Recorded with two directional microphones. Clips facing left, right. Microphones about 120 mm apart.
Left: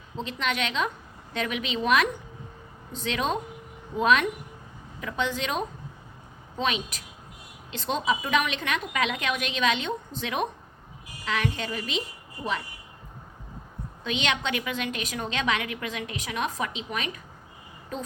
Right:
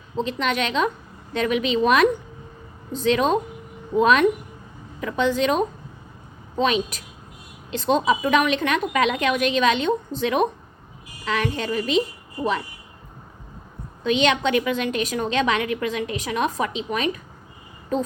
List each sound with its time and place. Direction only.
0.3 s a woman's voice: 40° right (ahead or behind)
14.0 s a woman's voice: 40° right (ahead or behind)